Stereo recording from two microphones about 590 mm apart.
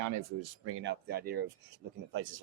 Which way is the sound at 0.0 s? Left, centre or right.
Right.